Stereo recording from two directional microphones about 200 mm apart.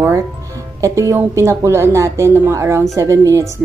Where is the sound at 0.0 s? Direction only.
15° right (ahead or behind).